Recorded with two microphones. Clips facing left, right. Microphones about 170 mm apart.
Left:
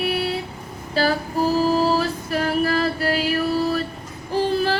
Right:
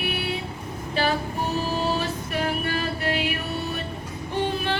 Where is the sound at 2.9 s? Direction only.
35° left (ahead or behind).